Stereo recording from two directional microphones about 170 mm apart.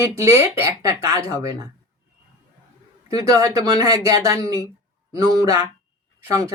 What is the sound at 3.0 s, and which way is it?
Speech, 20° right (ahead or behind).